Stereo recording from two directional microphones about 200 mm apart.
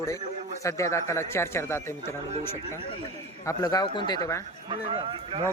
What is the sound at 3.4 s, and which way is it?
Speech, 20° left (ahead or behind).